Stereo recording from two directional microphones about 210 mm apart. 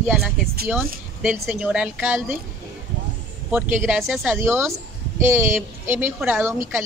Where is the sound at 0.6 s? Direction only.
5° right (ahead or behind).